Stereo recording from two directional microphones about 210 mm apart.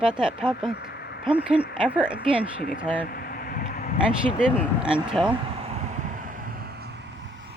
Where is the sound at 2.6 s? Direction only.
45° left (ahead or behind).